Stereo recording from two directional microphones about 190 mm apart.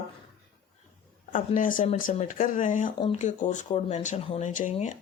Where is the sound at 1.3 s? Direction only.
45° left (ahead or behind).